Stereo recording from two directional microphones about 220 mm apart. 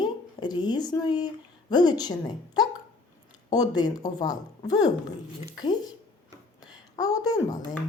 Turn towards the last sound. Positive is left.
turn(degrees=15)  # may be behind; listen again after turning